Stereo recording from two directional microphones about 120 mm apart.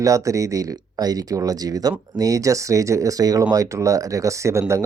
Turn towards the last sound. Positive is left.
turn(degrees=-25)  # may be behind; listen again after turning